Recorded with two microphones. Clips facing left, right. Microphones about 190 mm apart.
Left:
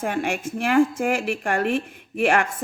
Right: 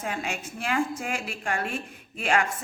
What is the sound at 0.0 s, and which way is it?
A woman's voice, 55° left (ahead or behind).